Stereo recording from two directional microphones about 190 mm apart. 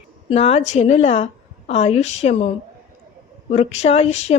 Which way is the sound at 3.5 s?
35° left (ahead or behind).